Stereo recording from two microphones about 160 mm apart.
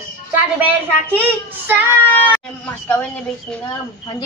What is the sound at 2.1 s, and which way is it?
Speech, 10° left (ahead or behind).